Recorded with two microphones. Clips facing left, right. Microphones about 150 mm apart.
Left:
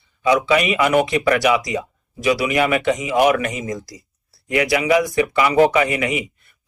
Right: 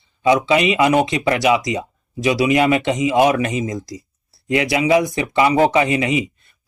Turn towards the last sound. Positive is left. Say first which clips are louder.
# right 2 dB
turn(degrees=-25)  # may be behind; listen again after turning